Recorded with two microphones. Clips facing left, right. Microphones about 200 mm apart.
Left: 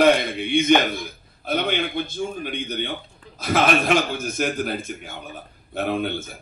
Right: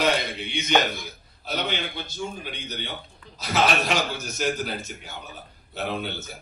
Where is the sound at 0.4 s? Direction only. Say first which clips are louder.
Left 6 dB; 55° left (ahead or behind).